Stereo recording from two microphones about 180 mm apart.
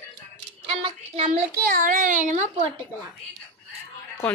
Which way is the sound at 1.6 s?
50° right (ahead or behind).